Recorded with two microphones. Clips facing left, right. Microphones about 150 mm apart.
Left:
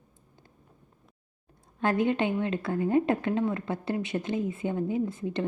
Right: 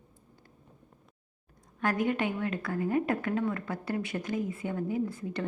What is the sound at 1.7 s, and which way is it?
A woman's voice, 25° left (ahead or behind).